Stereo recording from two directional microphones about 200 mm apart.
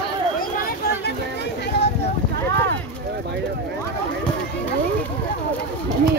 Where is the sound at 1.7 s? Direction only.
55° left (ahead or behind).